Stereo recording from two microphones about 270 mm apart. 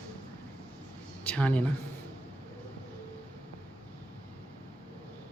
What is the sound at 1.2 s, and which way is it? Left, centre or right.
Speech, centre.